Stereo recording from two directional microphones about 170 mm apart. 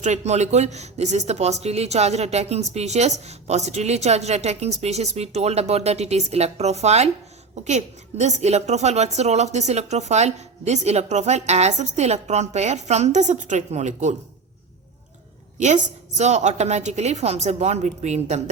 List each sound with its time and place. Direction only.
0.0 s a woman's voice: 40° right (ahead or behind)
15.5 s a woman's voice: 45° right (ahead or behind)